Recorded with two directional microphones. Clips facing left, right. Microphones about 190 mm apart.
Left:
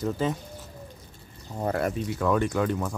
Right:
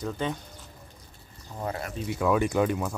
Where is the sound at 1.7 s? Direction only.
50° left (ahead or behind).